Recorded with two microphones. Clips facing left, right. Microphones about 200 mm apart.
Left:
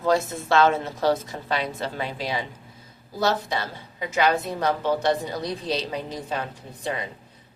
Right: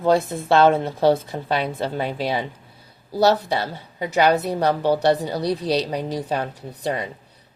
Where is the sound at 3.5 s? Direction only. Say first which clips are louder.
Right 5 dB; 35° right (ahead or behind).